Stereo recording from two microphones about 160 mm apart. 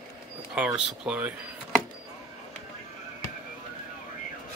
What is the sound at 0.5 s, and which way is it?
Speech, 5° right (ahead or behind).